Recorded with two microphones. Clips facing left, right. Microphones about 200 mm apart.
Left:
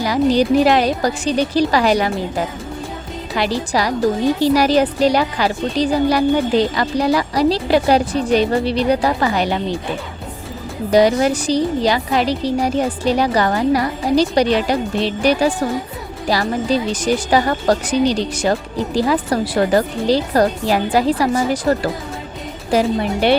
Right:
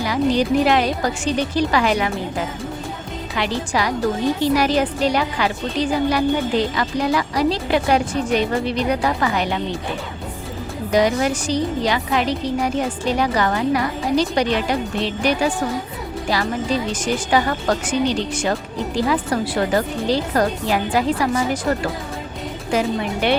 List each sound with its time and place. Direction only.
0.0 s a woman's voice: 35° left (ahead or behind)
3.3 s a woman's voice: 35° left (ahead or behind)
10.9 s a woman's voice: 35° left (ahead or behind)
16.9 s a woman's voice: 35° left (ahead or behind)